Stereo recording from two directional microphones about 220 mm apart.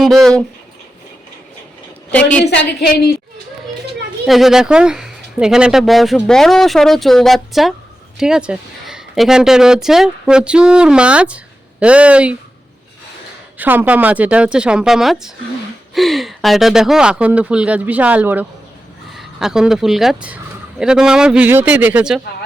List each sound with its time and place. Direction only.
0.0 s speech: centre (ahead or behind)
2.0 s speech: 5° left (ahead or behind)
2.4 s a woman's voice: 45° left (ahead or behind)
4.3 s speech: centre (ahead or behind)
13.6 s speech: 10° right (ahead or behind)